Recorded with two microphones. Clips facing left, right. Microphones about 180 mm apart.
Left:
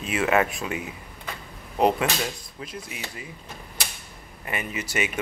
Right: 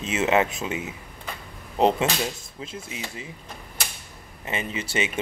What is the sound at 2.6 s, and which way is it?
Speech, 25° right (ahead or behind).